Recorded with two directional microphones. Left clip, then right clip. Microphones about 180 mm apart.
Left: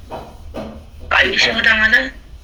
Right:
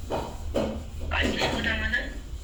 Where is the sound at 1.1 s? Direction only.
55° left (ahead or behind).